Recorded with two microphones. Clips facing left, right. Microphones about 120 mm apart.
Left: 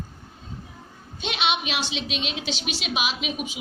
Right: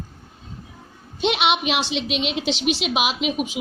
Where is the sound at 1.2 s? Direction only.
80° right.